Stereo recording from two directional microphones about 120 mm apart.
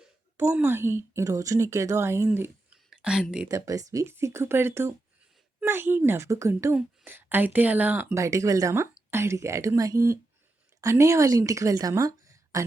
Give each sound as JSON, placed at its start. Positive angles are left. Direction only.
{"t": 0.6, "sound": "speech", "side_deg": -20}
{"t": 3.0, "sound": "speech", "side_deg": -5}
{"t": 3.5, "sound": "a woman's voice", "side_deg": -30}